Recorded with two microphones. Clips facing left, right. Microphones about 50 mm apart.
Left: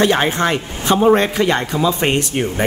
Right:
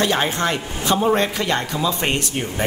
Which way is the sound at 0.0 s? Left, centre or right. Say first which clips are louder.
Left 4 dB; left.